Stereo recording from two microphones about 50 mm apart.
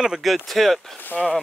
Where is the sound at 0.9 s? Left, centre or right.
Left.